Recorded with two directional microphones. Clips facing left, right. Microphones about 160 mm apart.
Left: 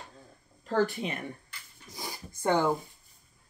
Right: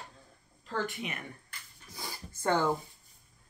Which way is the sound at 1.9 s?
15° left (ahead or behind).